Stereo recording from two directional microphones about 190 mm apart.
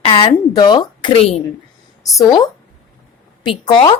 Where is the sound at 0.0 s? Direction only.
25° left (ahead or behind).